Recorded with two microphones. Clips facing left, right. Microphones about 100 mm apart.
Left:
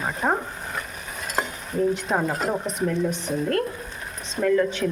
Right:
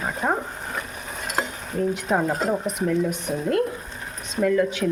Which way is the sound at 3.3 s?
15° right (ahead or behind).